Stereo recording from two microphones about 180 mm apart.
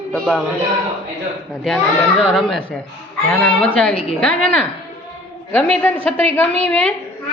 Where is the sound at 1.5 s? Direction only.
Centre (ahead or behind).